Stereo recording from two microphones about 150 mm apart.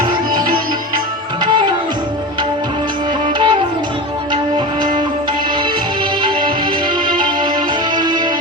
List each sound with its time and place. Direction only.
3.3 s music: 35° right (ahead or behind)
7.9 s music: 30° right (ahead or behind)